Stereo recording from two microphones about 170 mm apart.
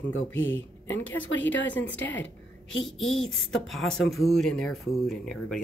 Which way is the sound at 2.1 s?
90° left.